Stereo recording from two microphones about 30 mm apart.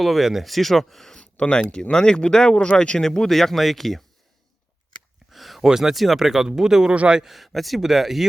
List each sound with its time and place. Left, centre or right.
0.0 s speech: centre
1.1 s a sound: left
1.7 s speech: left
3.0 s speech: centre
5.3 s a sound: centre
5.6 s speech: centre
6.0 s speech: centre
7.3 s speech: centre
7.8 s speech: centre